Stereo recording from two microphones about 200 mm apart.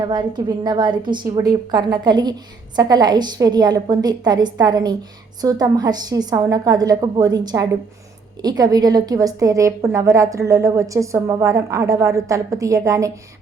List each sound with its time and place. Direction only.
0.0 s a woman's voice: 20° right (ahead or behind)